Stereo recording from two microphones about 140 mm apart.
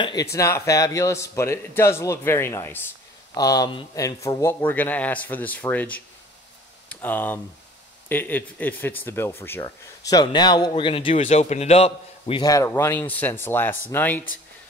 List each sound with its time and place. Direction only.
0.0 s a man's voice: 25° left (ahead or behind)
11.1 s a man's voice: 55° left (ahead or behind)
12.4 s speech: 20° left (ahead or behind)